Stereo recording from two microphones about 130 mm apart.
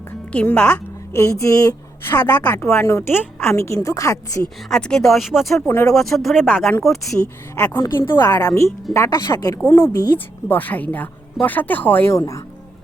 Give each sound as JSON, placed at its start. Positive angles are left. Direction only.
{"t": 0.3, "sound": "speech", "side_deg": 10}
{"t": 1.1, "sound": "speech", "side_deg": 20}
{"t": 4.4, "sound": "speech", "side_deg": 5}
{"t": 5.5, "sound": "speech", "side_deg": 20}
{"t": 5.9, "sound": "speech", "side_deg": 5}
{"t": 7.5, "sound": "speech", "side_deg": 15}
{"t": 8.2, "sound": "speech", "side_deg": 25}
{"t": 10.5, "sound": "speech", "side_deg": 10}